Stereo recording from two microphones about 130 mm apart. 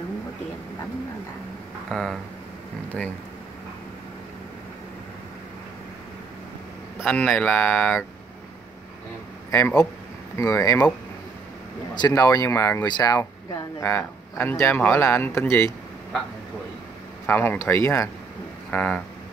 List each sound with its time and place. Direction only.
1.9 s speech: 5° left (ahead or behind)
7.1 s speech: 10° left (ahead or behind)
9.5 s speech: 20° left (ahead or behind)
11.9 s speech: 30° left (ahead or behind)
12.8 s speech: 30° left (ahead or behind)
17.3 s speech: 15° left (ahead or behind)